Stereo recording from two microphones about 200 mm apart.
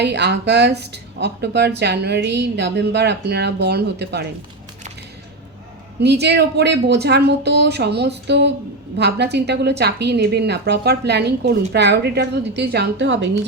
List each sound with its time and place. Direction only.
0.0 s a woman's voice: 55° right (ahead or behind)
6.0 s a woman's voice: 55° right (ahead or behind)